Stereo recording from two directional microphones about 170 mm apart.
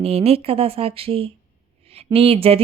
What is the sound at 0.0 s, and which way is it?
Speech, 35° right (ahead or behind).